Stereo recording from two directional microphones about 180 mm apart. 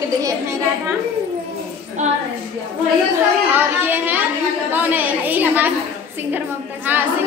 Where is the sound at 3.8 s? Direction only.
10° right (ahead or behind).